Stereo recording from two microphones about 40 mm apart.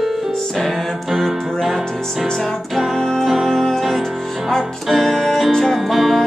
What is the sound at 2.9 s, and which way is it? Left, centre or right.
Music, centre.